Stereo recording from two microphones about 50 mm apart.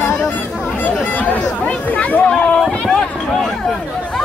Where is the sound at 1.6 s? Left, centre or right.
Left.